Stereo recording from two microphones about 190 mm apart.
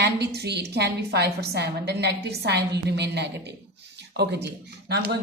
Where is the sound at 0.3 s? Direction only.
60° right (ahead or behind).